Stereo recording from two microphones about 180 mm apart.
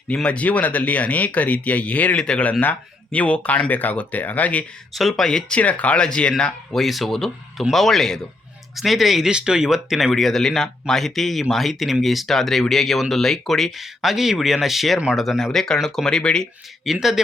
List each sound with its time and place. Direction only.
0.1 s speech: 5° left (ahead or behind)